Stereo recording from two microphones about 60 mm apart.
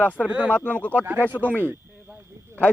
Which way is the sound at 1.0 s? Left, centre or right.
Right.